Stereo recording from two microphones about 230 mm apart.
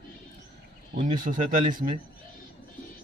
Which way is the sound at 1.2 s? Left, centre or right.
Right.